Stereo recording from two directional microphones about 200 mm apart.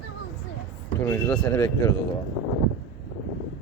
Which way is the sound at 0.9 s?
15° left (ahead or behind).